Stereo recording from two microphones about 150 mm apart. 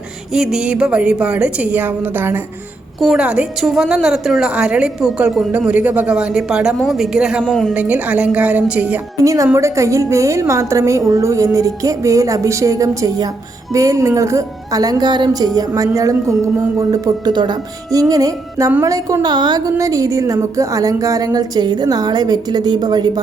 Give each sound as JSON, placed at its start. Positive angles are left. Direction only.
{"t": 0.3, "sound": "a woman's voice", "side_deg": -5}
{"t": 9.2, "sound": "a woman's voice", "side_deg": -20}